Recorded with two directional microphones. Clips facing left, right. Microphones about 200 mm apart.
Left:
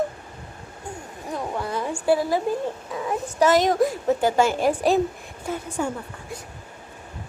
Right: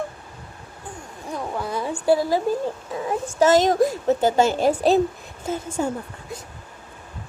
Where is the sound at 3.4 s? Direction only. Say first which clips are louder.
Right 2 dB; 25° right (ahead or behind).